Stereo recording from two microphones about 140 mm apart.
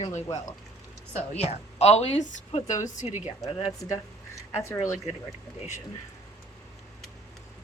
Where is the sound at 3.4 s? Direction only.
25° left (ahead or behind).